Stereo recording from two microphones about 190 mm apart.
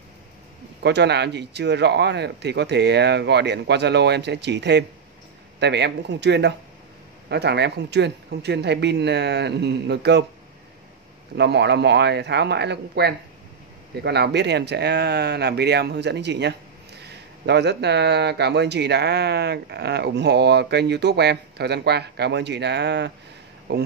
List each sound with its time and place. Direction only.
0.8 s speech: 60° right (ahead or behind)
11.3 s speech: 65° right (ahead or behind)